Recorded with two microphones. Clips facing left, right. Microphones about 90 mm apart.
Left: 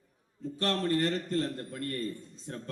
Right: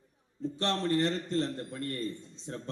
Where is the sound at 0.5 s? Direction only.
25° right (ahead or behind).